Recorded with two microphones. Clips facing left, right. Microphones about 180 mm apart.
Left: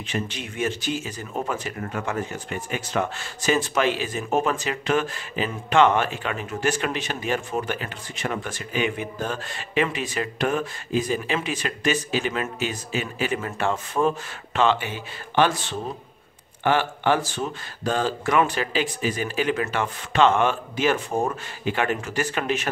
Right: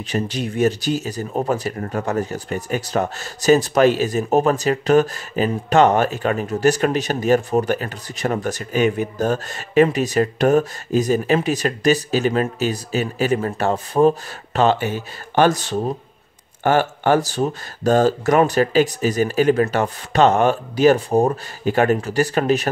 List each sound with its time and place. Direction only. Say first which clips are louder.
0.1 s speech: right 7 dB; 40° right (ahead or behind)